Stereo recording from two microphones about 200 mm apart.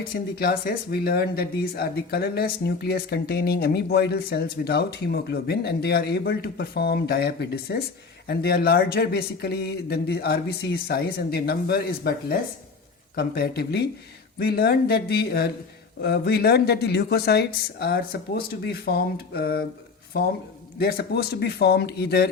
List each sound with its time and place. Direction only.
0.1 s speech: 50° left (ahead or behind)
20.7 s speech: 50° left (ahead or behind)